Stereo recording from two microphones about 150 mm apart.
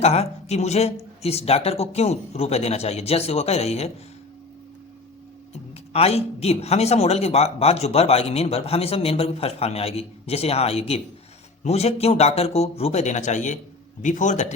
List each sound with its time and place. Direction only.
0.0 s a man's voice: 45° left (ahead or behind)
5.9 s a man's voice: 45° left (ahead or behind)